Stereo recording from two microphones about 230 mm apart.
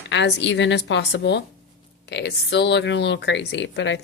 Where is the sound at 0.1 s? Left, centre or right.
Left.